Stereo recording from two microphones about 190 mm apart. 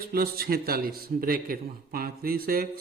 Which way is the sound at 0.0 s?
50° right (ahead or behind).